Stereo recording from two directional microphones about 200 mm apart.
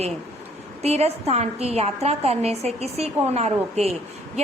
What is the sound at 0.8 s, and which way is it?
A woman's voice, 30° right (ahead or behind).